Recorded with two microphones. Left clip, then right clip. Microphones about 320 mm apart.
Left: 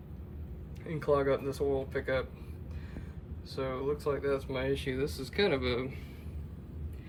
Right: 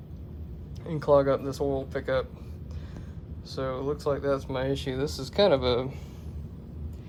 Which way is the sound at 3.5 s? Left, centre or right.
Centre.